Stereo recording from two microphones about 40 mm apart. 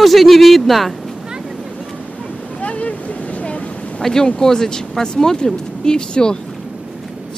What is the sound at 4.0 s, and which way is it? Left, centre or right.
Speech, centre.